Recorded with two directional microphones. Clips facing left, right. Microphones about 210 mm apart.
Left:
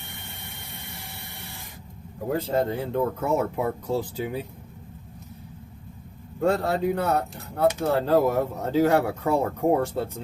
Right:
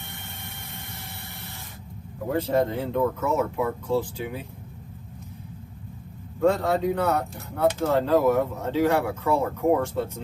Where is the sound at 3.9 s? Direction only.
40° left (ahead or behind).